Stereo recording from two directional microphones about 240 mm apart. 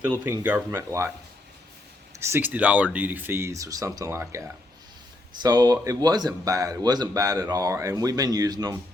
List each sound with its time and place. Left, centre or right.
0.3 s speech: centre
2.1 s speech: centre